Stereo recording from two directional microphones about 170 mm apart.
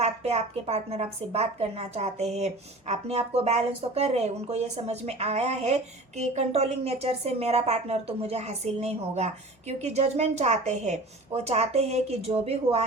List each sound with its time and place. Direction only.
0.0 s a woman's voice: 40° right (ahead or behind)